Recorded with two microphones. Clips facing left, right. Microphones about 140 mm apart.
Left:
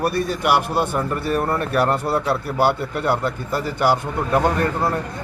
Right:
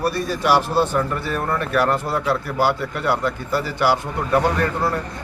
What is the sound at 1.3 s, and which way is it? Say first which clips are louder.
Speech: left 1 dB; 30° left (ahead or behind).